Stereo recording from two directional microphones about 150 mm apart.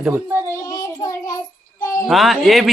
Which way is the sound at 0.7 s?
20° left (ahead or behind).